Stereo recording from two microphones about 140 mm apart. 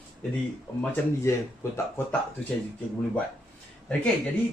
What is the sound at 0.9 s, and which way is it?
Speech, 15° left (ahead or behind).